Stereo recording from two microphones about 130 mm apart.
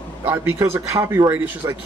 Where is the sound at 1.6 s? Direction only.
25° right (ahead or behind).